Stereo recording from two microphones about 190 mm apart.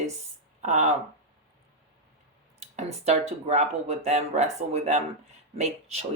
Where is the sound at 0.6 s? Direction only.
40° right (ahead or behind).